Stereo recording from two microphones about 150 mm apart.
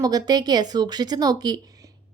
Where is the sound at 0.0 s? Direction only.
25° right (ahead or behind).